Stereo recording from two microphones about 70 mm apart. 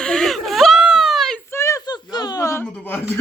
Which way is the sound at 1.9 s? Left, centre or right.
Left.